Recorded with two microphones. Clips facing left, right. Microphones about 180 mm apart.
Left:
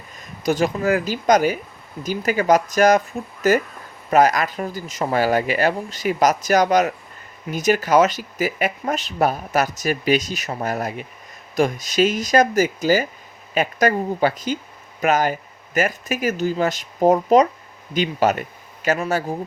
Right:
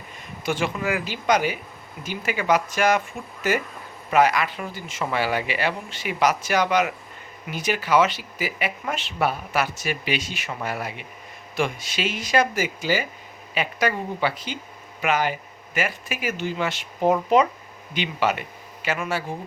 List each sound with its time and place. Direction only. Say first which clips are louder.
0.4 s speech: left 6 dB; 40° left (ahead or behind)